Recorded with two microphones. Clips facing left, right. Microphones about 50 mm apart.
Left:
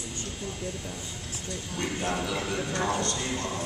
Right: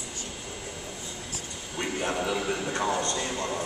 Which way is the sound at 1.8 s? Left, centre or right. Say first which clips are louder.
Right 1 dB; centre.